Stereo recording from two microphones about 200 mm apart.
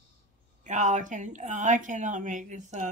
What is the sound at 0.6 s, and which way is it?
A woman's voice, 40° right (ahead or behind).